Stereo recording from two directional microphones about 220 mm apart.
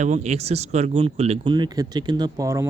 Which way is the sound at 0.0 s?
30° right (ahead or behind).